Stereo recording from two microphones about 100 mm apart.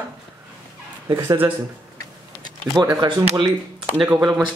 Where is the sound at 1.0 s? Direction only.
35° right (ahead or behind).